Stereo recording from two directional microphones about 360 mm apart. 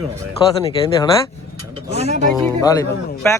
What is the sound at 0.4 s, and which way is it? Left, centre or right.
Speech, centre.